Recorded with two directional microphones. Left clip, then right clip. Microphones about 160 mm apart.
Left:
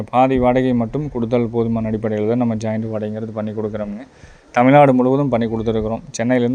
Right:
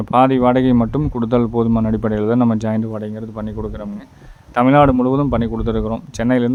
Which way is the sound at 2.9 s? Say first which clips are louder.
Left 3 dB; 5° right (ahead or behind).